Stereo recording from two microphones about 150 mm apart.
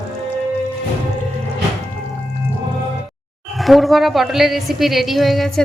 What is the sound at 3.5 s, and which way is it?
A woman's voice, centre (ahead or behind).